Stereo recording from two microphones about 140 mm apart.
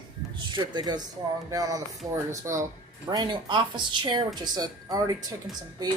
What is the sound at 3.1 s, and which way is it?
A woman's voice, 35° right (ahead or behind).